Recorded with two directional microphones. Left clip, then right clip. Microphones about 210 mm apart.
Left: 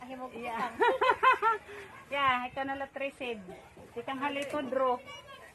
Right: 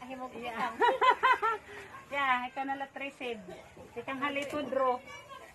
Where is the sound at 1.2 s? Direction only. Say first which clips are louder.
Left 2 dB; 25° left (ahead or behind).